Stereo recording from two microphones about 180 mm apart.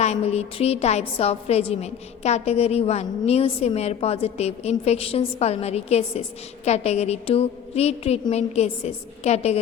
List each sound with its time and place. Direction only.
0.0 s a woman's voice: 35° left (ahead or behind)